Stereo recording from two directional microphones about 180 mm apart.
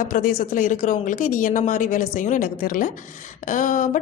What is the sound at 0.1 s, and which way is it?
A woman's voice, 50° left (ahead or behind).